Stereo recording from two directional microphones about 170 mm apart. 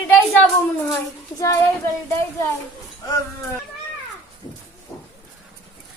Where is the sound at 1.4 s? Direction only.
20° left (ahead or behind).